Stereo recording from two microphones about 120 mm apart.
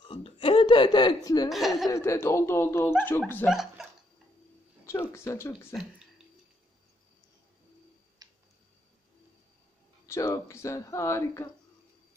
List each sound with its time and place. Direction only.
0.1 s a sound: 50° left (ahead or behind)
1.5 s speech: centre (ahead or behind)
1.9 s speech: 25° left (ahead or behind)
3.4 s speech: 5° right (ahead or behind)
5.1 s speech: 25° left (ahead or behind)
8.2 s tick-tock: 35° right (ahead or behind)
10.0 s speech: 25° left (ahead or behind)